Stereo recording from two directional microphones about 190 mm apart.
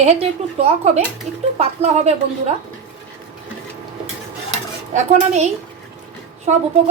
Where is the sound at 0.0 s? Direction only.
35° right (ahead or behind).